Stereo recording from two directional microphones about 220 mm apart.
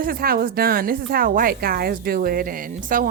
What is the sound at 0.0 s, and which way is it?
A woman's voice, 40° right (ahead or behind).